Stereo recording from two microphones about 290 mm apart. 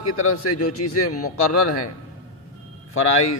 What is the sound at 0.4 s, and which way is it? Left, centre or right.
Speech, left.